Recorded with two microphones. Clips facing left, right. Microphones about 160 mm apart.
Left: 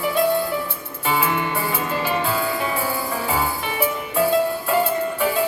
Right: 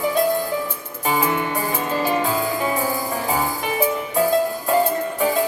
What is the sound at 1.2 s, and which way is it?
Music, 40° right (ahead or behind).